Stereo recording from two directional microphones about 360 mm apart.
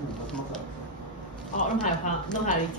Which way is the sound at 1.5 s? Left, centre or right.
Left.